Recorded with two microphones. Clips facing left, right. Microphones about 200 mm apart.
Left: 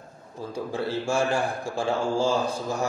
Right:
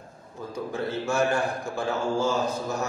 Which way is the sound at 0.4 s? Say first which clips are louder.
Left 1 dB; 30° left (ahead or behind).